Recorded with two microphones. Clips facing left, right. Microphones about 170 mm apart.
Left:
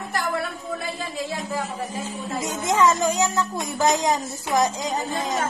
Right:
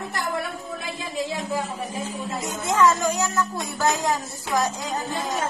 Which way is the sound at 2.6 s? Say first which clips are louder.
Even; 20° left (ahead or behind).